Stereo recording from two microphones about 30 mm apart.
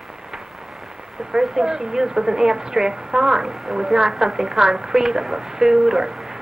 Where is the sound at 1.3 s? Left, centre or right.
Centre.